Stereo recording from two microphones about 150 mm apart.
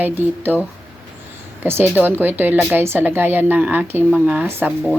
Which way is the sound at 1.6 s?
15° right (ahead or behind).